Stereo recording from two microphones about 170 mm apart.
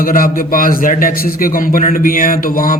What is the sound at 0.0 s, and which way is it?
A man's voice, 55° left (ahead or behind).